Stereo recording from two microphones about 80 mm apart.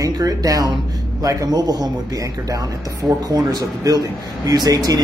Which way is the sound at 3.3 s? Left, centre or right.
Right.